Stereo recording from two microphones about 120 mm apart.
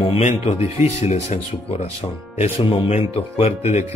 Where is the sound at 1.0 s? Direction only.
65° left (ahead or behind).